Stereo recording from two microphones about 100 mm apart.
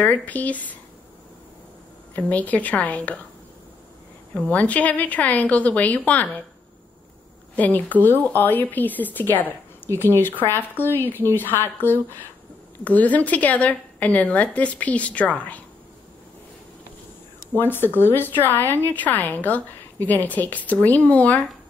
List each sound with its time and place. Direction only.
0.0 s a woman's voice: 15° left (ahead or behind)
2.1 s a woman's voice: 15° left (ahead or behind)
4.5 s a woman's voice: 15° left (ahead or behind)
7.5 s a woman's voice: 15° left (ahead or behind)
17.6 s a woman's voice: 20° left (ahead or behind)